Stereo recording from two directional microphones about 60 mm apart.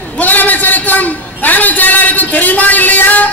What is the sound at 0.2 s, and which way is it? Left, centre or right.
A man's voice, left.